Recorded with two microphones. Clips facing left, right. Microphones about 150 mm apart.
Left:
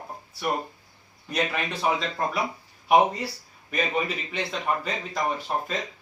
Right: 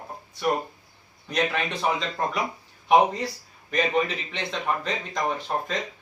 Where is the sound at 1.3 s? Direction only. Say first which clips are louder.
Right 2 dB; 5° left (ahead or behind).